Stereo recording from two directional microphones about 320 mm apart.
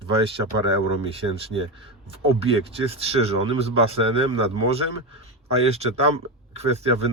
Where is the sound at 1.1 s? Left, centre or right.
Centre.